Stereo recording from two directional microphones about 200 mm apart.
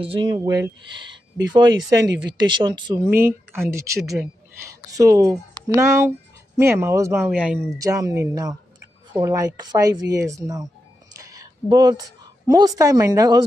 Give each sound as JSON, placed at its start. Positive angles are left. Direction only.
{"t": 0.0, "sound": "speech", "side_deg": -25}
{"t": 3.0, "sound": "speech", "side_deg": -10}
{"t": 7.8, "sound": "speech", "side_deg": -15}
{"t": 11.1, "sound": "a sound", "side_deg": -15}
{"t": 12.4, "sound": "speech", "side_deg": -20}